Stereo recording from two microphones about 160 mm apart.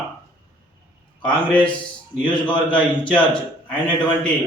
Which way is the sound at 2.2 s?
30° left (ahead or behind).